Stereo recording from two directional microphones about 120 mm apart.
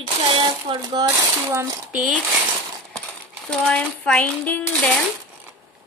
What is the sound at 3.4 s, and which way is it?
Speech, 5° left (ahead or behind).